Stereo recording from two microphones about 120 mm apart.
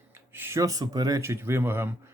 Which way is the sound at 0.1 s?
20° right (ahead or behind).